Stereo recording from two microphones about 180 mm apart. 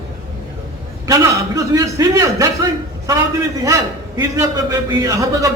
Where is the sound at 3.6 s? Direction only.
20° right (ahead or behind).